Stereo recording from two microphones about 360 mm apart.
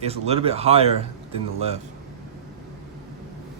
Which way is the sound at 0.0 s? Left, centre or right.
Centre.